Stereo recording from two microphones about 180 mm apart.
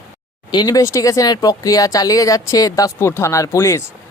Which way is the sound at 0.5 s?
20° left (ahead or behind).